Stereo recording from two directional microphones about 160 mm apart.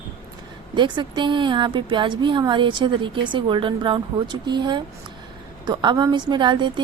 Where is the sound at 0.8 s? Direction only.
30° right (ahead or behind).